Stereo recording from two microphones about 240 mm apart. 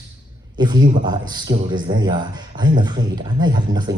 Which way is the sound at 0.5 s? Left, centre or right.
Centre.